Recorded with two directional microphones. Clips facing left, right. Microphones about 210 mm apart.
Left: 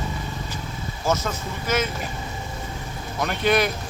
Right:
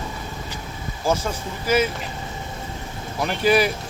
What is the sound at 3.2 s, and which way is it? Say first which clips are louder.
Speech: right 2 dB; 5° right (ahead or behind).